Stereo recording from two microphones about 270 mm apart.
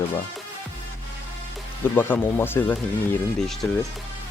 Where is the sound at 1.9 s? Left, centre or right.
Centre.